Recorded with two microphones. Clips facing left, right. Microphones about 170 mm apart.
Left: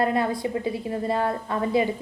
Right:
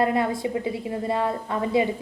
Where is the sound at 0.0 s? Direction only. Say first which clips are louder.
Right 1 dB; 25° right (ahead or behind).